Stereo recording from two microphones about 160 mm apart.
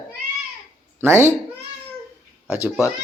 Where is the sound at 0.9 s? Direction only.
15° right (ahead or behind).